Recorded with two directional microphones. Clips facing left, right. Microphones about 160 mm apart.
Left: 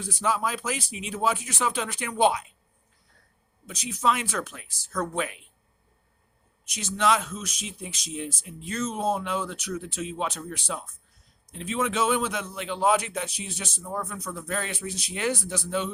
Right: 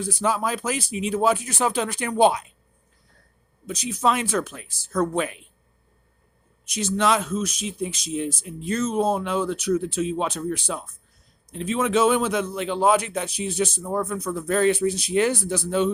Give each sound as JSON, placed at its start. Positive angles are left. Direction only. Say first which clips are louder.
{"t": 0.0, "sound": "speech", "louder": "right 3 dB", "side_deg": -35}
{"t": 3.7, "sound": "speech", "louder": "right 3 dB", "side_deg": -35}
{"t": 6.7, "sound": "speech", "louder": "right 3 dB", "side_deg": -35}